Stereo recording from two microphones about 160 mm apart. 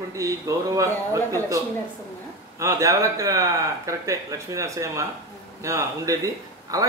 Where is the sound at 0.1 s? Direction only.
20° right (ahead or behind).